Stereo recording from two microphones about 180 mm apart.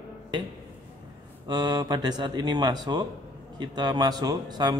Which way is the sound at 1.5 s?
25° right (ahead or behind).